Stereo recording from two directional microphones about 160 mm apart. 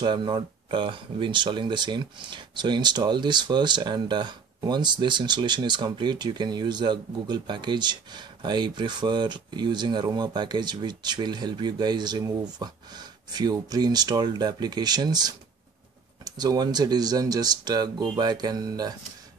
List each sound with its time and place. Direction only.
0.0 s speech: 30° right (ahead or behind)